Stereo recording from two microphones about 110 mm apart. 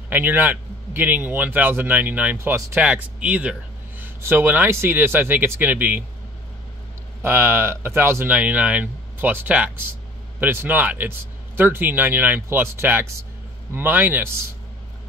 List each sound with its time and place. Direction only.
0.1 s speech: 20° right (ahead or behind)
7.2 s speech: 20° right (ahead or behind)